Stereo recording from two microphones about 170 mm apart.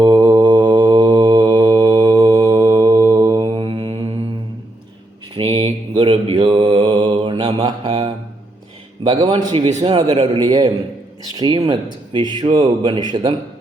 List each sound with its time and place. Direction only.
0.3 s mantra: 25° right (ahead or behind)
5.4 s mantra: 35° right (ahead or behind)
9.0 s speech: 30° right (ahead or behind)